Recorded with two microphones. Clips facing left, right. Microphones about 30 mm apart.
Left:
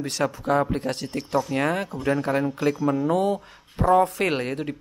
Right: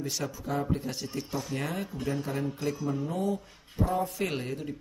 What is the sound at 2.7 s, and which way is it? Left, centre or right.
Speech, left.